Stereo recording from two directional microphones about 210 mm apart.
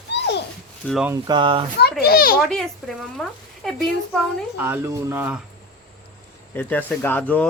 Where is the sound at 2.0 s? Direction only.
45° left (ahead or behind).